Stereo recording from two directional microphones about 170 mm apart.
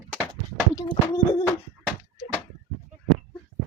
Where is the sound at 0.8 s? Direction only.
20° left (ahead or behind).